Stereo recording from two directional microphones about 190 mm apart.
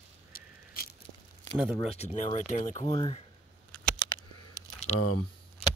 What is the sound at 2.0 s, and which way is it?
Speech, 35° left (ahead or behind).